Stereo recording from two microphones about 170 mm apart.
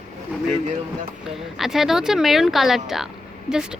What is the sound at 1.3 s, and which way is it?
Speech, centre (ahead or behind).